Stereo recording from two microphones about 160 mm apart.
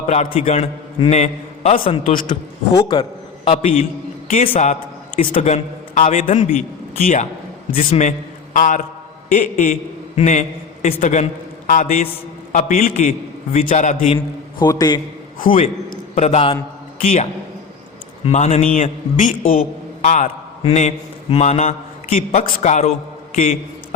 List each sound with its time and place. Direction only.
0.3 s a man's voice: 40° left (ahead or behind)
7.0 s a man's voice: 55° left (ahead or behind)
14.6 s a man's voice: 25° left (ahead or behind)
15.5 s a man's voice: 50° left (ahead or behind)
18.3 s a man's voice: 45° left (ahead or behind)
20.6 s a man's voice: 40° left (ahead or behind)